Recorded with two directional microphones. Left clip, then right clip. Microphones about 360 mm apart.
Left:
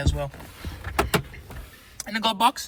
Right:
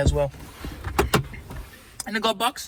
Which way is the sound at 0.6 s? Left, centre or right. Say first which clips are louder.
Right 1 dB; centre.